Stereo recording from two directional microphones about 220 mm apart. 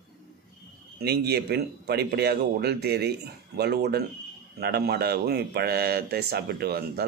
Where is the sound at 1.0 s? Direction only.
45° right (ahead or behind).